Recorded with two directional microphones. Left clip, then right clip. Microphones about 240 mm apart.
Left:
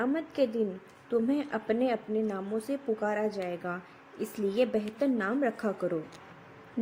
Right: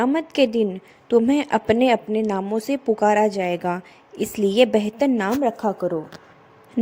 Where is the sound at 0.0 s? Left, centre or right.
Right.